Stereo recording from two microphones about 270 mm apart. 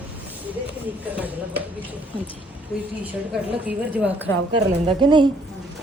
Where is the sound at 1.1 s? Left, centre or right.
Centre.